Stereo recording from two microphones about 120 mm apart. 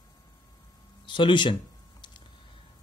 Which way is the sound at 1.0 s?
40° left (ahead or behind).